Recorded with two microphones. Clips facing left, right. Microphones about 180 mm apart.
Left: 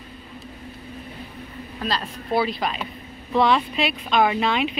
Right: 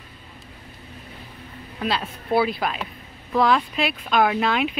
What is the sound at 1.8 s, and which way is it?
Speech, 10° right (ahead or behind).